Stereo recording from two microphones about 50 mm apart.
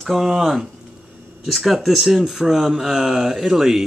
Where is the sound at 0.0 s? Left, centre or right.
Centre.